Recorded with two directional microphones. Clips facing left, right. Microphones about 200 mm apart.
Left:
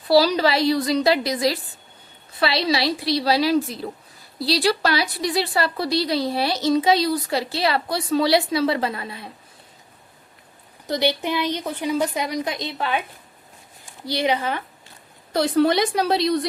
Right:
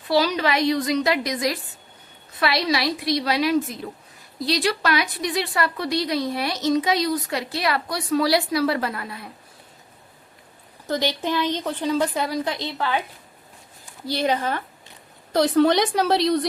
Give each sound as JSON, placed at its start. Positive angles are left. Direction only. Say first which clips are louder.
{"t": 0.1, "sound": "a woman's voice", "louder": "left 4 dB", "side_deg": 35}
{"t": 10.8, "sound": "a woman's voice", "louder": "left 2 dB", "side_deg": 15}
{"t": 14.1, "sound": "a woman's voice", "louder": "even", "side_deg": 10}